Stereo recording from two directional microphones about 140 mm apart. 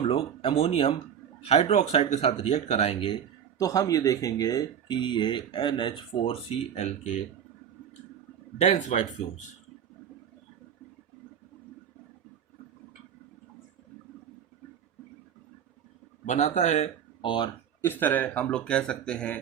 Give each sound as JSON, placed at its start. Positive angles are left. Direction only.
{"t": 0.0, "sound": "speech", "side_deg": 45}
{"t": 3.6, "sound": "speech", "side_deg": 25}
{"t": 8.5, "sound": "a man's voice", "side_deg": 55}
{"t": 16.2, "sound": "a man's voice", "side_deg": 55}
{"t": 17.2, "sound": "speech", "side_deg": 35}
{"t": 17.8, "sound": "speech", "side_deg": 15}